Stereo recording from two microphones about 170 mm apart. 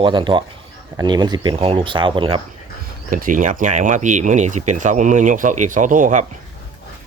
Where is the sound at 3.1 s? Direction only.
50° right (ahead or behind).